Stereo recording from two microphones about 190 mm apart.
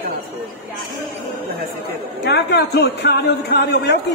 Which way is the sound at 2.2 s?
60° left (ahead or behind).